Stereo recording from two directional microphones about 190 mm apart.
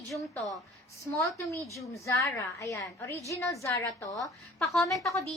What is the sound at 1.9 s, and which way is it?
A woman's voice, 15° left (ahead or behind).